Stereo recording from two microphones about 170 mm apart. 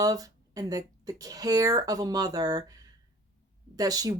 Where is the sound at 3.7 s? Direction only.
20° right (ahead or behind).